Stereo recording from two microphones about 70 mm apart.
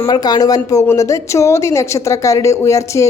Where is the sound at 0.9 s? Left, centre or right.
Left.